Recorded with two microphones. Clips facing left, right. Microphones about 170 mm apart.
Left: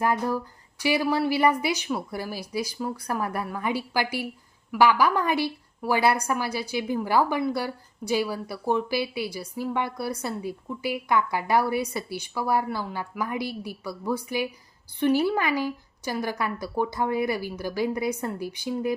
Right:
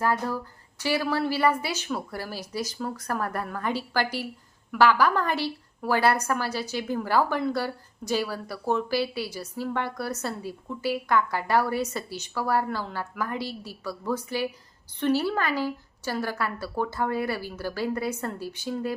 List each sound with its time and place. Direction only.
0.0 s a woman's voice: 15° left (ahead or behind)